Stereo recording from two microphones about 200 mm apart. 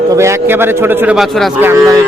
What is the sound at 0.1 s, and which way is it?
A man's voice, 15° right (ahead or behind).